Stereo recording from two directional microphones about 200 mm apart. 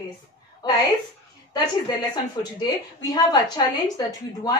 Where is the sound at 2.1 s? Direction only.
20° left (ahead or behind).